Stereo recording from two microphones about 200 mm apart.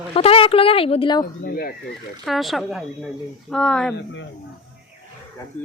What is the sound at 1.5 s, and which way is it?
Speech, 50° left (ahead or behind).